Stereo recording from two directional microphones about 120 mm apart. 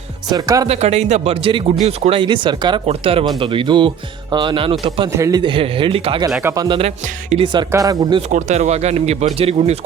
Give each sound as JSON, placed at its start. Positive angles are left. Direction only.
{"t": 0.3, "sound": "speech", "side_deg": -30}
{"t": 0.7, "sound": "speech", "side_deg": -65}
{"t": 1.3, "sound": "speech", "side_deg": -50}
{"t": 2.8, "sound": "speech", "side_deg": -50}
{"t": 5.1, "sound": "speech", "side_deg": -25}
{"t": 5.4, "sound": "speech", "side_deg": -45}
{"t": 7.7, "sound": "speech", "side_deg": -30}
{"t": 8.3, "sound": "speech", "side_deg": -85}